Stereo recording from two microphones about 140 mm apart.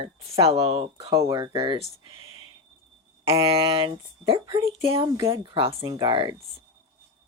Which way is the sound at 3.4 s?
35° right (ahead or behind).